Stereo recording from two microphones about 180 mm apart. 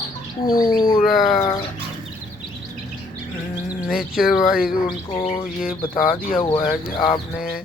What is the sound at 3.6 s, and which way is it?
Speech, 5° right (ahead or behind).